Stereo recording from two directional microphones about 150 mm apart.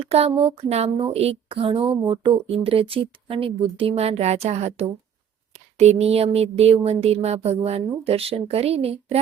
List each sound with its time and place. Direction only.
0.0 s speech: 40° right (ahead or behind)